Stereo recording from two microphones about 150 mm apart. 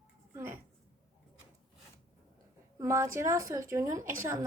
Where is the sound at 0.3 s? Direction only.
15° right (ahead or behind).